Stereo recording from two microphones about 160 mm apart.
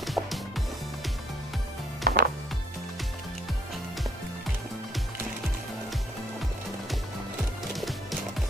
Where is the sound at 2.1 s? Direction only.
65° right (ahead or behind).